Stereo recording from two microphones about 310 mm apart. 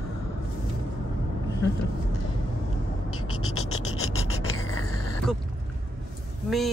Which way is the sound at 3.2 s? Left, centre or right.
Left.